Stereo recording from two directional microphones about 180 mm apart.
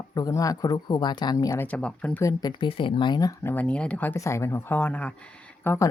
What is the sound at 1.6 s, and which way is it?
Speech, 5° left (ahead or behind).